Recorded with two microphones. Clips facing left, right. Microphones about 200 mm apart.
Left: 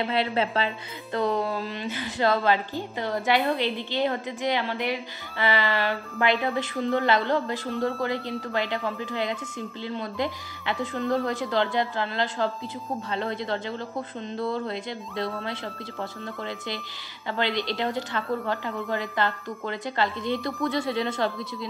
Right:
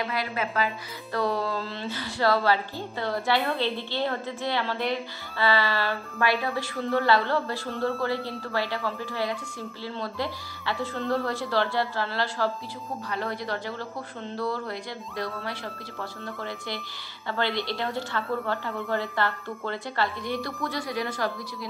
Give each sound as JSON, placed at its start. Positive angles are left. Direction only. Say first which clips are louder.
{"t": 0.0, "sound": "speech", "louder": "left 4 dB", "side_deg": 25}